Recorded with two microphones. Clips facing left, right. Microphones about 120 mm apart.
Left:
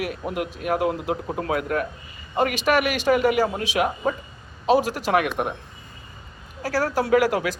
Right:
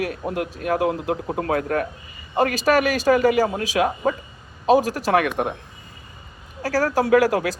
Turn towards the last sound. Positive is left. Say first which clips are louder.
# right 2 dB
turn(degrees=-40)  # may be behind; listen again after turning